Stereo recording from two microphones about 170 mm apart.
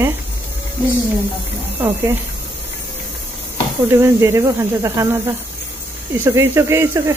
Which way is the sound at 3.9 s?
15° right (ahead or behind).